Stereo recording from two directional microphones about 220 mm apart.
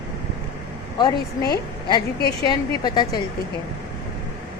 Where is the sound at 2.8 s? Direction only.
20° left (ahead or behind).